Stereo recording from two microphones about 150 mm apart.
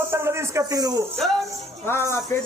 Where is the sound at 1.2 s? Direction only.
Centre (ahead or behind).